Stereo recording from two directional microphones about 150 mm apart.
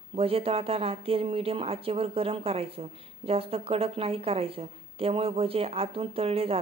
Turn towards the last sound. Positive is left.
turn(degrees=-40)  # may be behind; listen again after turning